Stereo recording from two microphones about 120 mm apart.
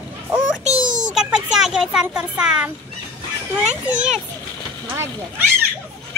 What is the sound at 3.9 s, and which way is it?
Speech, 10° right (ahead or behind).